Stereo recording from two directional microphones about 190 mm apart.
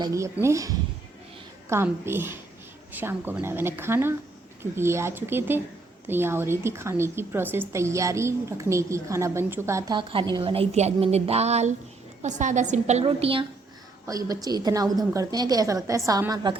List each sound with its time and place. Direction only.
0.0 s a woman's voice: 15° right (ahead or behind)
14.1 s a woman's voice: 20° right (ahead or behind)